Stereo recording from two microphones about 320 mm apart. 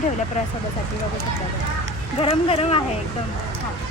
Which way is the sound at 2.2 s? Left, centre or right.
Centre.